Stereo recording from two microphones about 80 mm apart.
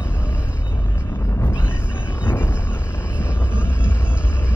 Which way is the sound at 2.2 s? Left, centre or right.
Left.